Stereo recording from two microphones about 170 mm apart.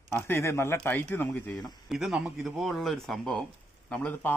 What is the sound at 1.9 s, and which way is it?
Speech, centre (ahead or behind).